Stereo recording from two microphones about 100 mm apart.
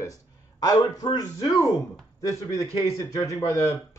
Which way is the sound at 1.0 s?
45° left (ahead or behind).